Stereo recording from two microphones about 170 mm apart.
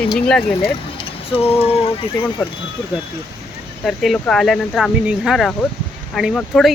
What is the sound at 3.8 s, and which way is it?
Speech, centre (ahead or behind).